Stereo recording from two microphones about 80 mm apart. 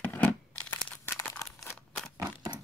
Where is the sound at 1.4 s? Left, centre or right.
Left.